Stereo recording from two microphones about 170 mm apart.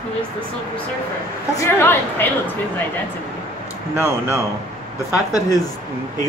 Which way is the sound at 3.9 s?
15° right (ahead or behind).